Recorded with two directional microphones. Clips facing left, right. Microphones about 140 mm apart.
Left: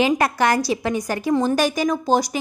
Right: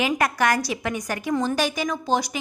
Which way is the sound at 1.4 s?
45° left (ahead or behind).